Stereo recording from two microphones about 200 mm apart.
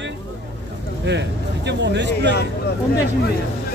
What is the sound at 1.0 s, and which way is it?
Speech, 60° right (ahead or behind).